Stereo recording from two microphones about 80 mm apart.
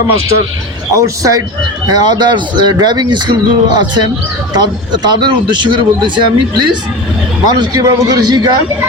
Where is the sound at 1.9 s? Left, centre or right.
Right.